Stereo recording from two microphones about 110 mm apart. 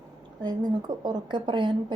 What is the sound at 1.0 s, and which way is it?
Speech, 40° right (ahead or behind).